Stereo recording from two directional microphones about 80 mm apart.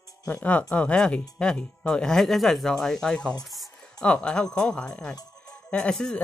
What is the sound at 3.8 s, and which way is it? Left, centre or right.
Speech, centre.